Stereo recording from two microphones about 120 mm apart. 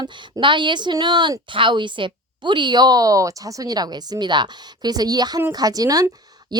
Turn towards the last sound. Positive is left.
turn(degrees=-35)  # may be behind; listen again after turning